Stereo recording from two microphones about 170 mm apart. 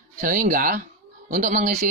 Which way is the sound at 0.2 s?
50° right (ahead or behind).